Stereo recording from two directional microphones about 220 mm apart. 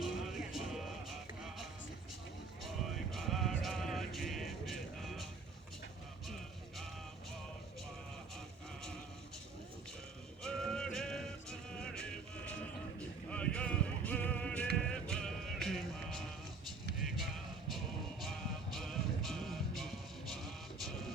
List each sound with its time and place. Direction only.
0.0 s music: centre (ahead or behind)
2.6 s music: centre (ahead or behind)
10.4 s music: 5° left (ahead or behind)
13.3 s a sound: 5° left (ahead or behind)
14.8 s music: 5° left (ahead or behind)
18.2 s music: centre (ahead or behind)